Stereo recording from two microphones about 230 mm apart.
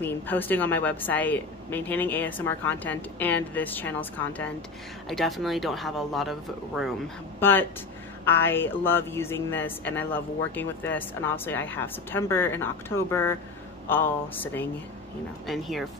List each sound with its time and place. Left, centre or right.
0.0 s speech: centre
7.3 s speech: centre